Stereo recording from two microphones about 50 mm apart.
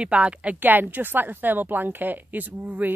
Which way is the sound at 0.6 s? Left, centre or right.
Right.